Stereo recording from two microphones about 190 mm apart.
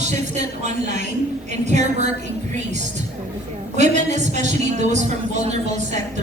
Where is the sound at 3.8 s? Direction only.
40° right (ahead or behind).